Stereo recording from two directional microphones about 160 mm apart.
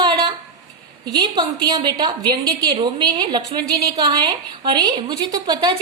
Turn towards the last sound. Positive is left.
turn(degrees=-25)  # may be behind; listen again after turning